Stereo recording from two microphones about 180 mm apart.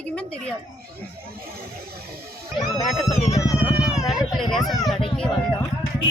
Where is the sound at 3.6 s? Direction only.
5° right (ahead or behind).